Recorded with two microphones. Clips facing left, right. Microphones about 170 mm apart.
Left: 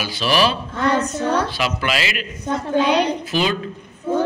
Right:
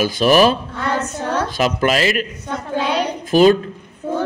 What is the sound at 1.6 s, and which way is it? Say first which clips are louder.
Speech: right 6 dB; 40° right (ahead or behind).